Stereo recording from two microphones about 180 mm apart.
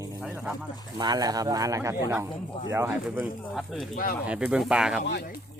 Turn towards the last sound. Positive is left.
turn(degrees=60)  # may be behind; listen again after turning